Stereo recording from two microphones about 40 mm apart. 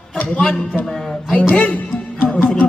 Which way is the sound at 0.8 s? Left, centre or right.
Centre.